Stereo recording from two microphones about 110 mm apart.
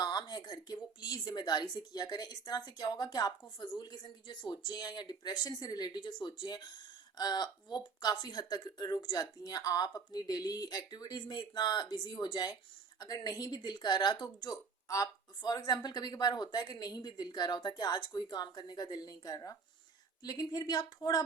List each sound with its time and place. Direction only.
0.0 s a woman's voice: 40° left (ahead or behind)